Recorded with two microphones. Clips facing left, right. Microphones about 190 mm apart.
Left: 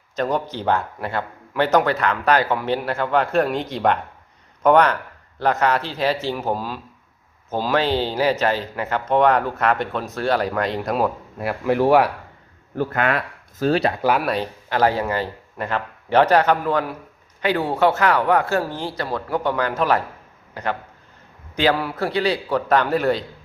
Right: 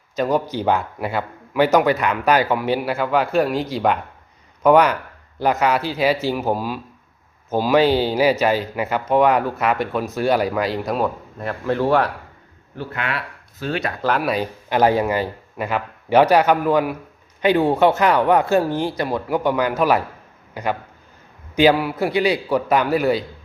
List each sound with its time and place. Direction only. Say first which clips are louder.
0.2 s speech: right 3 dB; 5° right (ahead or behind); by 12.1 s 10° left (ahead or behind)
12.7 s speech: left 6 dB; 50° left (ahead or behind)
14.0 s speech: left 1 dB; 5° left (ahead or behind)
14.7 s a man's voice: right 3 dB; 15° right (ahead or behind)